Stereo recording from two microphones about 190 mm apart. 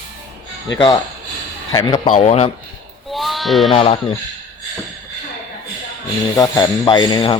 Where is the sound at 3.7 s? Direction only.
30° left (ahead or behind).